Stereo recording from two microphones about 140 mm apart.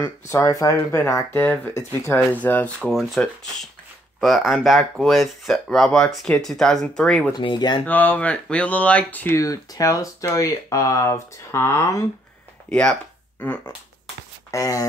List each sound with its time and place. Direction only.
0.3 s speech: 25° left (ahead or behind); by 7.3 s 5° left (ahead or behind)
7.3 s speech: 30° left (ahead or behind)
7.8 s speech: 10° left (ahead or behind)
9.4 s speech: 25° left (ahead or behind)
12.6 s speech: 5° left (ahead or behind)
14.5 s speech: 25° left (ahead or behind)